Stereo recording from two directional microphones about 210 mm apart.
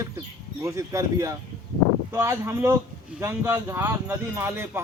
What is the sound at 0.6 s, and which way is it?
Speech, 15° right (ahead or behind).